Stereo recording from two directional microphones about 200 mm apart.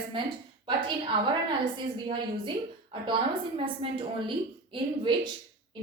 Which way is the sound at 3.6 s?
25° right (ahead or behind).